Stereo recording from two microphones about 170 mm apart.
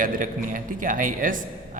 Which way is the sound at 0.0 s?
55° right (ahead or behind).